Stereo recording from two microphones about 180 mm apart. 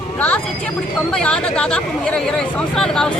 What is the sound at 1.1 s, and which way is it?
Speech, 5° left (ahead or behind).